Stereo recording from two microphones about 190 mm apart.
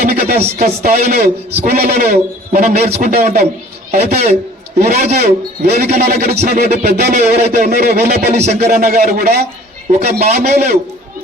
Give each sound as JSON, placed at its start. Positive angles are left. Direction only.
{"t": 0.0, "sound": "a man's voice", "side_deg": -50}